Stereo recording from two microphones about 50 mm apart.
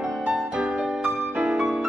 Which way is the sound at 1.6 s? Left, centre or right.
Centre.